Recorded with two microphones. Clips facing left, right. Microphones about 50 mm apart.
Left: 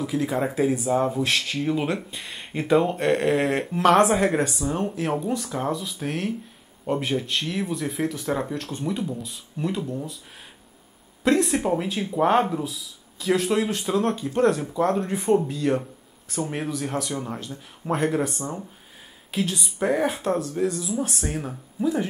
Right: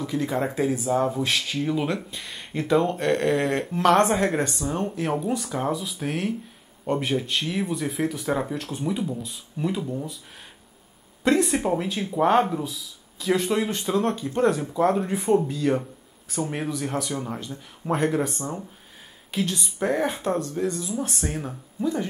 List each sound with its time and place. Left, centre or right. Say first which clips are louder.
0.0 s speech: left 1 dB; centre
11.2 s speech: even; centre